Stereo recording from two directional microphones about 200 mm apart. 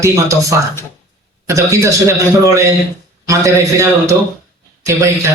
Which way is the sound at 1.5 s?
15° right (ahead or behind).